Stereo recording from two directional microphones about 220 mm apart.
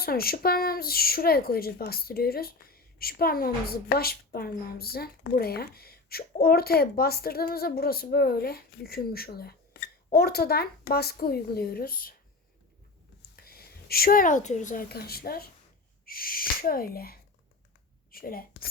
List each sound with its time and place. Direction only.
0.0 s speech: 45° left (ahead or behind)
13.3 s a woman's voice: 45° left (ahead or behind)